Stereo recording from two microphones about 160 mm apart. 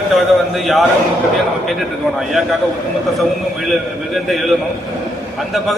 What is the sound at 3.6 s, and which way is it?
Speech, centre (ahead or behind).